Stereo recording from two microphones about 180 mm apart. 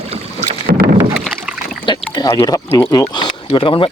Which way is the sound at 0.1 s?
40° right (ahead or behind).